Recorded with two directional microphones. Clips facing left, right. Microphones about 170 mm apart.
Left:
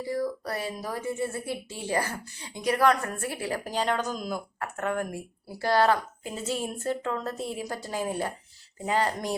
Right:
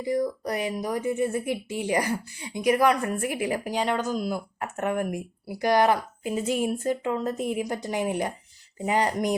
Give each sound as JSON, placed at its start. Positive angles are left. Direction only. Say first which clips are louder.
{"t": 0.0, "sound": "speech", "louder": "right 4 dB", "side_deg": -15}
{"t": 4.6, "sound": "speech", "louder": "right 3 dB", "side_deg": -15}